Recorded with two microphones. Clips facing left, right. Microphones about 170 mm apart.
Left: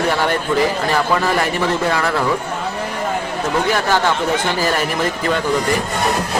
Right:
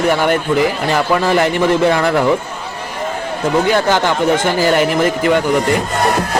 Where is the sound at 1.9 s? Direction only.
20° right (ahead or behind).